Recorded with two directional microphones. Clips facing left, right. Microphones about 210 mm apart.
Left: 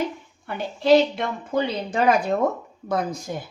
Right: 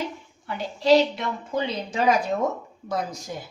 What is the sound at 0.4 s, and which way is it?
A woman's voice, 55° left (ahead or behind).